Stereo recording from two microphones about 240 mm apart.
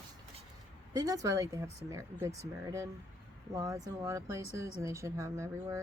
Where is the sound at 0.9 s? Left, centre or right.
Centre.